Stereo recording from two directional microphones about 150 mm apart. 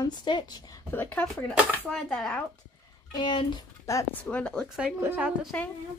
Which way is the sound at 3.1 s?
30° left (ahead or behind).